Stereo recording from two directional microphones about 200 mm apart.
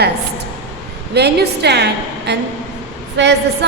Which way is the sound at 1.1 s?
55° right (ahead or behind).